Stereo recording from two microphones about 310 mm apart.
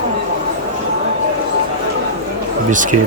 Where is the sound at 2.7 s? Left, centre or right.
Right.